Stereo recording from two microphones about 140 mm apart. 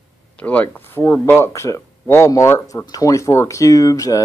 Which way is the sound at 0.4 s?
10° left (ahead or behind).